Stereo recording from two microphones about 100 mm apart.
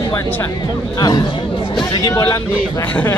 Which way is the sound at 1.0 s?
45° left (ahead or behind).